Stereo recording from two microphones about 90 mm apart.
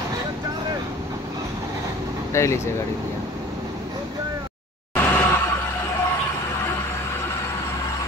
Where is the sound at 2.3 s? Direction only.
30° left (ahead or behind).